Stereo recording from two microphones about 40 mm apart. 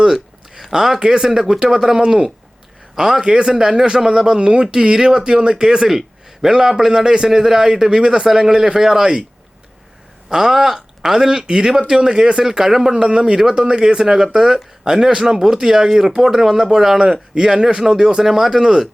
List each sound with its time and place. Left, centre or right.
0.0 s a man's voice: centre
10.2 s a man's voice: centre